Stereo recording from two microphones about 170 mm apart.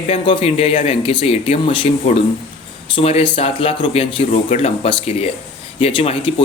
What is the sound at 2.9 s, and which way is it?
Speech, 35° left (ahead or behind).